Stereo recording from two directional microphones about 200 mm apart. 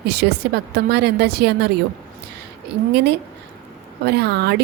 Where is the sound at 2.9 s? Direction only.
55° right (ahead or behind).